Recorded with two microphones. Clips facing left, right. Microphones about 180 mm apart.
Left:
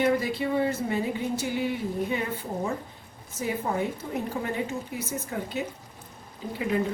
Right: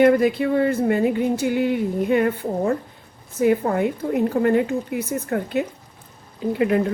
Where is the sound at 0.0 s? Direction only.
55° right (ahead or behind).